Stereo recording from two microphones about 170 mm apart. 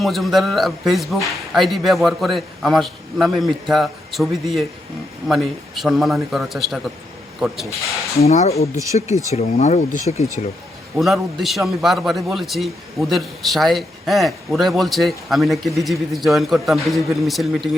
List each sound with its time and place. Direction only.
0.0 s a man's voice: centre (ahead or behind)
8.2 s speech: 40° left (ahead or behind)
8.7 s speech: 20° right (ahead or behind)
9.3 s speech: 40° left (ahead or behind)
10.9 s a man's voice: centre (ahead or behind)